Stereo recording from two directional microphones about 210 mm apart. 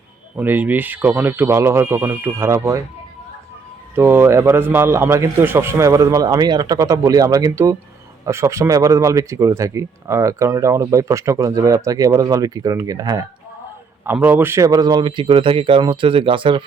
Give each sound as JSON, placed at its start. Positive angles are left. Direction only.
{"t": 0.3, "sound": "speech", "side_deg": -10}
{"t": 3.9, "sound": "a man's voice", "side_deg": -10}